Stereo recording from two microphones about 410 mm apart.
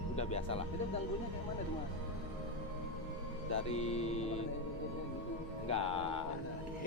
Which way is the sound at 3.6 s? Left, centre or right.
Centre.